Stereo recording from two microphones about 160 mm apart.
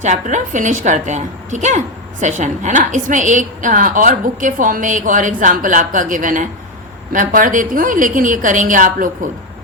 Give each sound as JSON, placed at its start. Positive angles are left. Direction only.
{"t": 0.0, "sound": "a woman's voice", "side_deg": -50}